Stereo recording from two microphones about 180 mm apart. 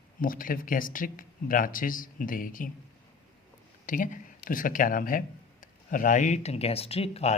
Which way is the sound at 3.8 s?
50° left (ahead or behind).